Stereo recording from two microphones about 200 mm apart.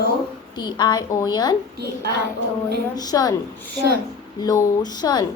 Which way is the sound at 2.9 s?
20° left (ahead or behind).